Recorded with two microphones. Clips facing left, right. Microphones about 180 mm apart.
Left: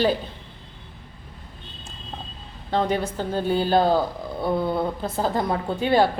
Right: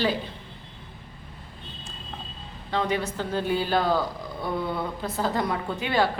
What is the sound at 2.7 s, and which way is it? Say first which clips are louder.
Speech: left 3 dB; 35° left (ahead or behind).